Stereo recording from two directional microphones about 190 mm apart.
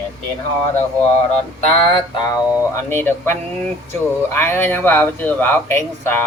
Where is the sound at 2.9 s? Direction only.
10° left (ahead or behind).